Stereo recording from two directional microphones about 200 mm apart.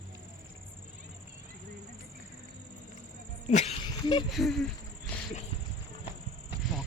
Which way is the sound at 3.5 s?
30° left (ahead or behind).